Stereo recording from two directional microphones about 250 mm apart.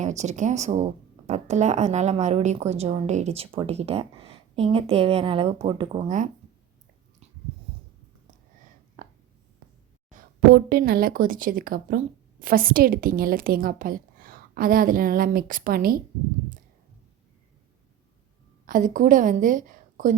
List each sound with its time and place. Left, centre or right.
0.0 s a woman's voice: right
9.0 s whispering: right
10.1 s a sound: right
10.5 s a woman's voice: right
18.6 s a woman's voice: right